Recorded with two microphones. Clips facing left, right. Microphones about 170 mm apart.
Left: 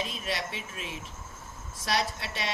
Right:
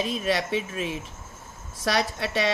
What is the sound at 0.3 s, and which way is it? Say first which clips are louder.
Speech: right 9 dB; 75° right (ahead or behind).